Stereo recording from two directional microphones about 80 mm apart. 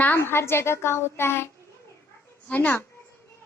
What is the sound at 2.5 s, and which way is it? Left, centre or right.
Speech, centre.